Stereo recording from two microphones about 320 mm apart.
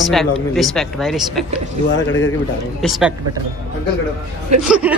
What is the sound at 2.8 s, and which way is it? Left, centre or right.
Speech, centre.